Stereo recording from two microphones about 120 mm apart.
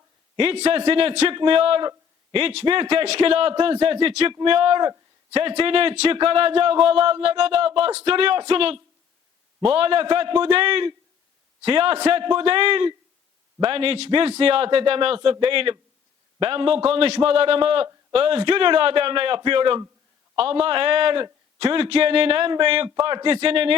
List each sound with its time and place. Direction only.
0.3 s a man's voice: 55° right (ahead or behind)